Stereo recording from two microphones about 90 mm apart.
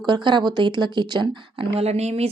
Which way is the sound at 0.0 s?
60° right (ahead or behind).